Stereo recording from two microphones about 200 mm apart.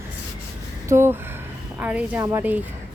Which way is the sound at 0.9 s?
10° right (ahead or behind).